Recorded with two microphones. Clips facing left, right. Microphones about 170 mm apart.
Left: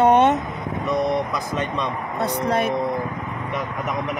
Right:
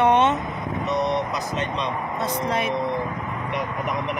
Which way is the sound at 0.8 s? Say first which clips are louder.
Left 2 dB; 50° left (ahead or behind).